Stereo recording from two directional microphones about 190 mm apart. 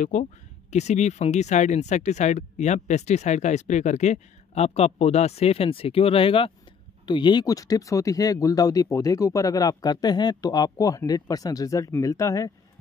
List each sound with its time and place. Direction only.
0.0 s speech: 40° left (ahead or behind); by 12.5 s 15° left (ahead or behind)